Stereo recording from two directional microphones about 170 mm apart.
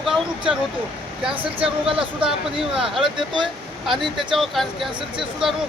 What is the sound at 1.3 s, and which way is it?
Speech, 30° right (ahead or behind).